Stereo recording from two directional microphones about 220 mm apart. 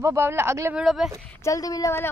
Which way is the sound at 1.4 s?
15° left (ahead or behind).